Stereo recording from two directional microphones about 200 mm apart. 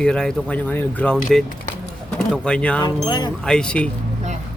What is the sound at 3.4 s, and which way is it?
Speech, 5° left (ahead or behind).